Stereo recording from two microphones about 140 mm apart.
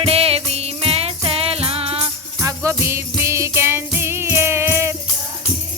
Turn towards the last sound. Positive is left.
turn(degrees=-20)  # may be behind; listen again after turning